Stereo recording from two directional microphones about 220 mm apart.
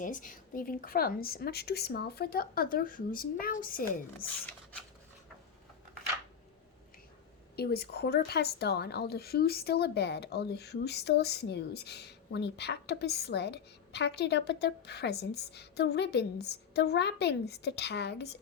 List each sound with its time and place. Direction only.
0.0 s speech: 35° left (ahead or behind)
7.5 s a woman's voice: 45° left (ahead or behind)